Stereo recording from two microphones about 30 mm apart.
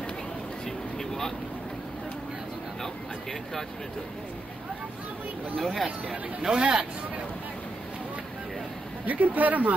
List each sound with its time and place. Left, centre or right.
0.9 s vehicle: centre
5.6 s speech: centre
6.5 s speech: right
9.0 s speech: right